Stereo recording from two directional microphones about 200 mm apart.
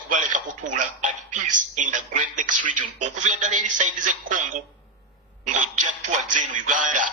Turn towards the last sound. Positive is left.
turn(degrees=-40)  # may be behind; listen again after turning